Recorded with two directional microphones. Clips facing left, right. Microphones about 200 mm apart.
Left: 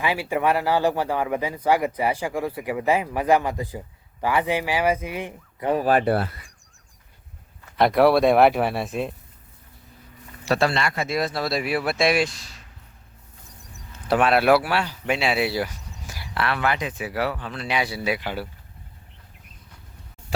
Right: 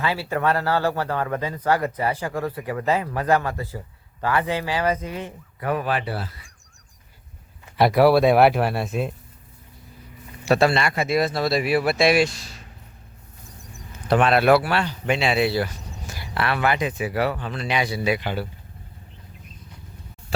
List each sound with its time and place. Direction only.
0.0 s speech: 15° left (ahead or behind)
5.8 s speech: 45° left (ahead or behind)
7.8 s speech: 5° right (ahead or behind)
10.4 s speech: 15° right (ahead or behind)
14.1 s speech: 5° left (ahead or behind)
16.3 s speech: 5° right (ahead or behind)